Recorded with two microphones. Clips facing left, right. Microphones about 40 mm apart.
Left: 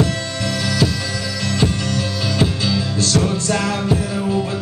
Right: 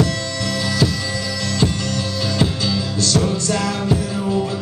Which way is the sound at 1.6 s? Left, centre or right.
Left.